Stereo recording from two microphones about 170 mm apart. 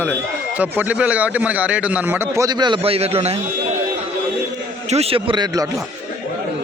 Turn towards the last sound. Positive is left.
turn(degrees=-25)  # may be behind; listen again after turning